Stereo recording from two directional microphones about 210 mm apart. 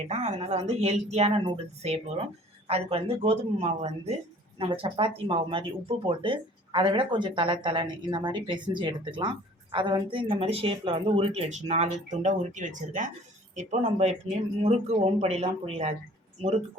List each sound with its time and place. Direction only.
0.1 s a woman's voice: 30° right (ahead or behind)